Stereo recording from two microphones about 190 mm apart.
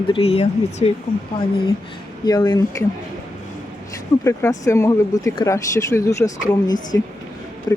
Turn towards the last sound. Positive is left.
turn(degrees=15)  # may be behind; listen again after turning